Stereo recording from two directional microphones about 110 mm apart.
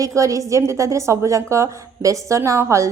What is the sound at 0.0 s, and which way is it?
A woman's voice, 30° right (ahead or behind).